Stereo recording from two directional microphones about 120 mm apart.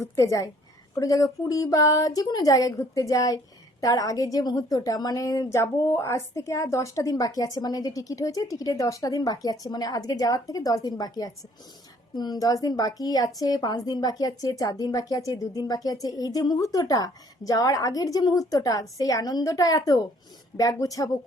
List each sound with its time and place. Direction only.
0.0 s a woman's voice: 25° left (ahead or behind)